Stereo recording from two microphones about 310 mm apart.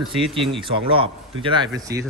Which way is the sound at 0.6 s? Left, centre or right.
Centre.